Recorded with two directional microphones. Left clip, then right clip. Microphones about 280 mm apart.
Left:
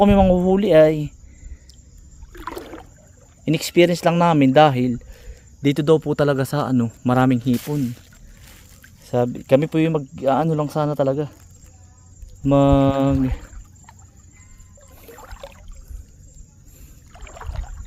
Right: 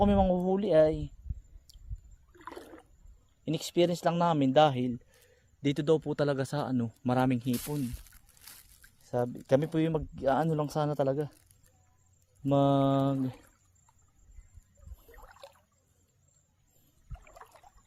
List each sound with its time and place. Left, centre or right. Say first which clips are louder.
0.0 s speech: left 11 dB; centre
3.4 s speech: left 12 dB; centre
9.0 s speech: left 11 dB; centre
12.4 s speech: left 10 dB; centre
15.3 s a sound: left 10 dB; centre
17.1 s rowboat: left 13 dB; centre